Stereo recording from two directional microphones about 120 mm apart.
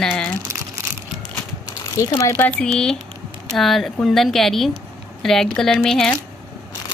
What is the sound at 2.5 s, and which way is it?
A woman's voice, 5° left (ahead or behind).